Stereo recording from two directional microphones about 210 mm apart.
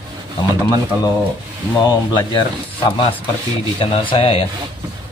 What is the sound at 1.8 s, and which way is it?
Speech, 20° left (ahead or behind).